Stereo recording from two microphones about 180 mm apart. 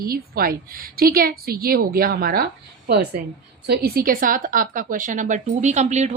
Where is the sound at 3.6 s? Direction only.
60° right (ahead or behind).